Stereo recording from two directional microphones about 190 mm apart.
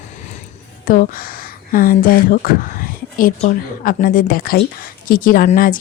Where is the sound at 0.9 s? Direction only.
50° left (ahead or behind).